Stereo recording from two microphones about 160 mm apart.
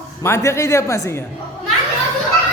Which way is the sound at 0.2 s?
15° left (ahead or behind).